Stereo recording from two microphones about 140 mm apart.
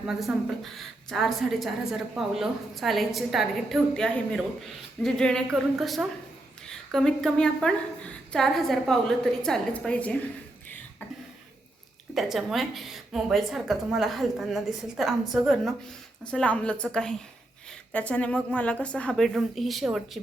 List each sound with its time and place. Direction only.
0.0 s a woman's voice: 5° right (ahead or behind)
12.1 s a woman's voice: centre (ahead or behind)